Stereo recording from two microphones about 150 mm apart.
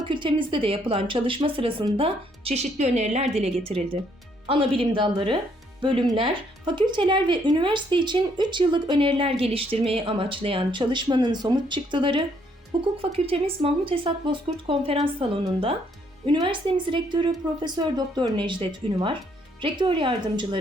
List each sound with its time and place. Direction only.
0.0 s speech: 30° right (ahead or behind)